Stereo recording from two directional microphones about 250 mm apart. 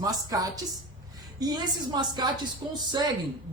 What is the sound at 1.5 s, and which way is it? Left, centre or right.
Speech, centre.